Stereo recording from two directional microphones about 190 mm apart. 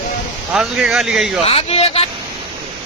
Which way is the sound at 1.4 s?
30° left (ahead or behind).